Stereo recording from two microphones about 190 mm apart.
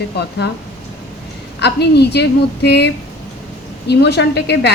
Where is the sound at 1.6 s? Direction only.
60° left (ahead or behind).